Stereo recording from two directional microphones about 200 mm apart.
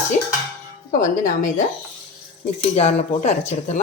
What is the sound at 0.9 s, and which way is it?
Speech, 40° left (ahead or behind).